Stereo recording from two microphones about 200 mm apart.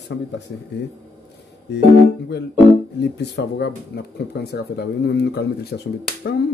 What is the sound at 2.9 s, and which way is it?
Speech, 60° left (ahead or behind).